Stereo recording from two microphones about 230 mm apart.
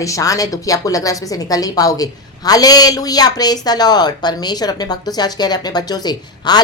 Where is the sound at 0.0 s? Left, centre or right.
Centre.